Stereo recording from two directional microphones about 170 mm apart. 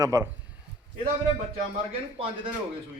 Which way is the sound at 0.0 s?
15° right (ahead or behind).